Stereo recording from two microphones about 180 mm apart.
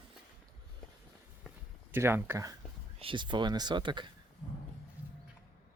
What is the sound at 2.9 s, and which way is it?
Speech, 30° right (ahead or behind).